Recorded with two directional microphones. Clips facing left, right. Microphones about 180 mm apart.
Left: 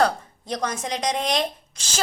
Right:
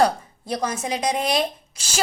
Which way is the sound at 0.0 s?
10° right (ahead or behind).